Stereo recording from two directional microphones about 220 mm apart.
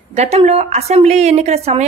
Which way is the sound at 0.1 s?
30° right (ahead or behind).